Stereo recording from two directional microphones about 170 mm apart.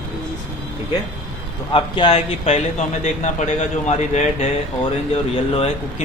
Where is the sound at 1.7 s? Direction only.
30° left (ahead or behind).